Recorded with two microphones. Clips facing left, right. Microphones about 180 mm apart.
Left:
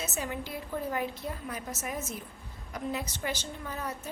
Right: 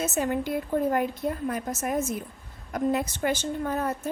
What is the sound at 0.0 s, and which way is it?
A woman's voice, 50° right (ahead or behind).